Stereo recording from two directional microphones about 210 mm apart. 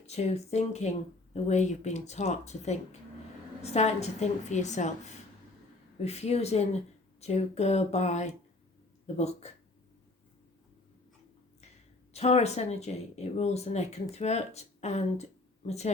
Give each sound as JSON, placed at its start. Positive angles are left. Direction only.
{"t": 0.0, "sound": "speech", "side_deg": 30}
{"t": 6.0, "sound": "speech", "side_deg": 30}
{"t": 12.1, "sound": "speech", "side_deg": 30}